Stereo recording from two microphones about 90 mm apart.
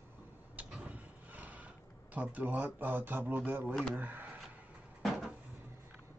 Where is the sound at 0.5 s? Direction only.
15° right (ahead or behind).